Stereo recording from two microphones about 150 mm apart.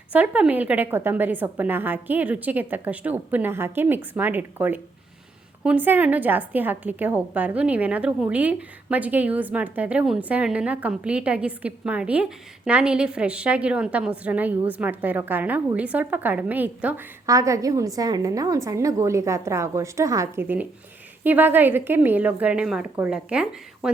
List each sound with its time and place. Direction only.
0.1 s a woman's voice: 10° right (ahead or behind)
17.2 s a woman's voice: 20° right (ahead or behind); by 23.9 s 5° right (ahead or behind)